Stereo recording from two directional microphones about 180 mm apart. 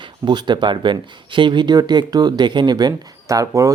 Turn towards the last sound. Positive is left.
turn(degrees=-15)  # may be behind; listen again after turning